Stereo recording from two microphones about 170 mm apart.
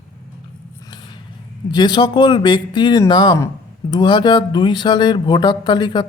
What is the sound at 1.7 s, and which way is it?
Speech, 25° left (ahead or behind).